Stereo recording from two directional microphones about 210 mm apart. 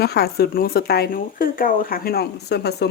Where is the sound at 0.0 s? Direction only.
50° left (ahead or behind).